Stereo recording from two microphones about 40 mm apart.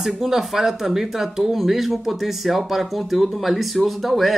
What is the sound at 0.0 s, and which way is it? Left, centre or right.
Speech, centre.